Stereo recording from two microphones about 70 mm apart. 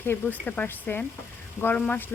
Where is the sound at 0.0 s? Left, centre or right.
Left.